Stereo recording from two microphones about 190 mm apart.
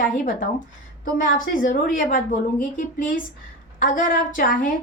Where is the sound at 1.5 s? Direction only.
45° left (ahead or behind).